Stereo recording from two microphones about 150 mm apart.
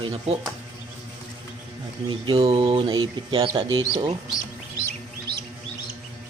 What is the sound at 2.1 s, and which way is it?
Speech, 35° right (ahead or behind).